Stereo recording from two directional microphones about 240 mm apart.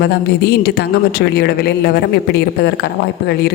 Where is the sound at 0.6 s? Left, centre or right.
Left.